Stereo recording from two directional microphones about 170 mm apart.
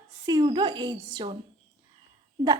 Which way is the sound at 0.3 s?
25° right (ahead or behind).